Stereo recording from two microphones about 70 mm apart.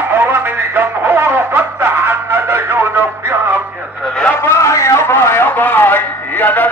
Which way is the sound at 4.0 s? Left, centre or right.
Centre.